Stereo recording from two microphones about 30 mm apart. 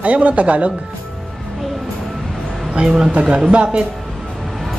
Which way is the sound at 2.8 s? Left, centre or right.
Right.